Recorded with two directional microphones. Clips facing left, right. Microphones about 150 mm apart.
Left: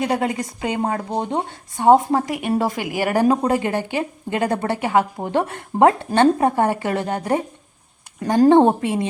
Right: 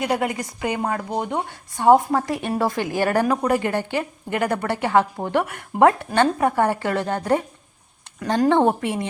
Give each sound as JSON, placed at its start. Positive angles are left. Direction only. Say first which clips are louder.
{"t": 0.0, "sound": "a woman's voice", "louder": "left 2 dB", "side_deg": 25}
{"t": 8.4, "sound": "a woman's voice", "louder": "left 5 dB", "side_deg": 20}